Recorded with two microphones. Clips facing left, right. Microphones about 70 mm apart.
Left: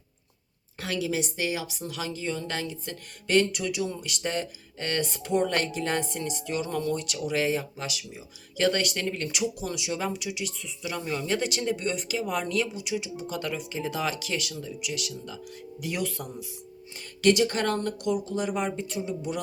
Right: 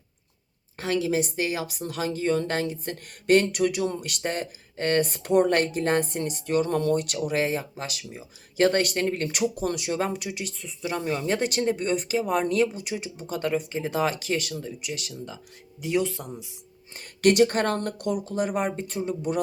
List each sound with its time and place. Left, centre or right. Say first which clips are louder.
0.8 s speech: right 4 dB; right
11.3 s speech: right 4 dB; right
15.8 s speech: right 6 dB; right
17.2 s speech: right 3 dB; right